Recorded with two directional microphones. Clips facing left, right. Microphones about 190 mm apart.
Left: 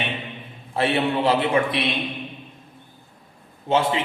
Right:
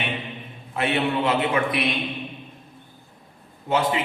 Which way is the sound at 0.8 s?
30° left (ahead or behind).